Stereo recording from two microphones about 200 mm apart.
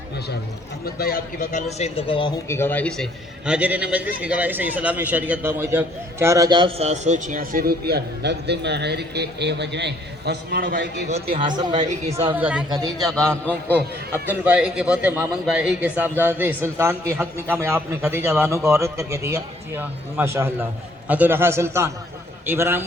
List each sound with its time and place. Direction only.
0.9 s a man's voice: 50° left (ahead or behind)
1.8 s speech: 25° left (ahead or behind)
2.5 s speech: 10° left (ahead or behind)
3.4 s a man's voice: 5° right (ahead or behind); by 11.1 s 55° right (ahead or behind)
11.7 s a woman's voice: 35° right (ahead or behind)
12.4 s a man's voice: 5° right (ahead or behind)
13.7 s a man's voice: 10° right (ahead or behind)